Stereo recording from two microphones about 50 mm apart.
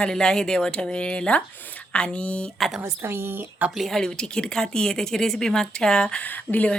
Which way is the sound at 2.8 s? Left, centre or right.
Right.